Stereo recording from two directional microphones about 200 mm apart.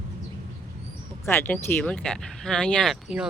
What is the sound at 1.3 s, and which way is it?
Speech, 10° left (ahead or behind).